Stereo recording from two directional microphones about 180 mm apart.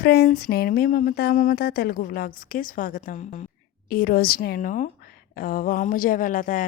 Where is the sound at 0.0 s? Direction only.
60° left (ahead or behind).